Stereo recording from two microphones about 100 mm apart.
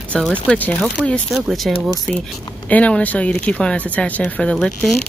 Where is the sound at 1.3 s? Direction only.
Centre (ahead or behind).